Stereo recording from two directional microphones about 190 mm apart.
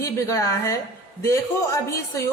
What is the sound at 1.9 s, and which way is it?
Speech, 15° left (ahead or behind).